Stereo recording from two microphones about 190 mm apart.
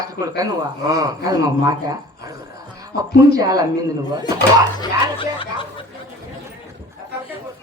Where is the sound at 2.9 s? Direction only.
55° left (ahead or behind).